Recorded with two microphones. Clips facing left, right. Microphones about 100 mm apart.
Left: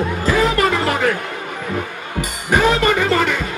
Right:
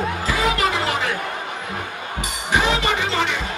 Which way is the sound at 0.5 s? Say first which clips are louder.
Left 4 dB; 45° left (ahead or behind).